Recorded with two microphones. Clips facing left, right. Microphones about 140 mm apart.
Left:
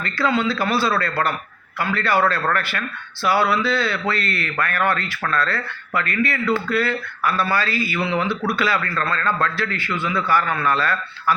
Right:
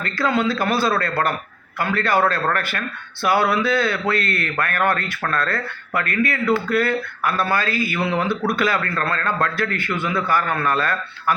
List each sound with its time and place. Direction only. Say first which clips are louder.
0.0 s a man's voice: even; 45° right (ahead or behind)